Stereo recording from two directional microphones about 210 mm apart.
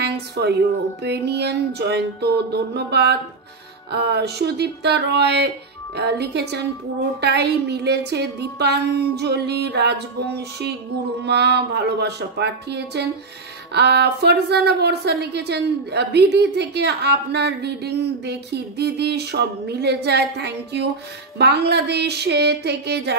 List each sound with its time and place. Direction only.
0.0 s a woman's voice: 50° right (ahead or behind)